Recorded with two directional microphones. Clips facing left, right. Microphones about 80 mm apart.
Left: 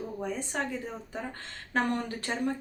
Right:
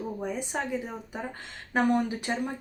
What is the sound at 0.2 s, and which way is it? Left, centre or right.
Speech, centre.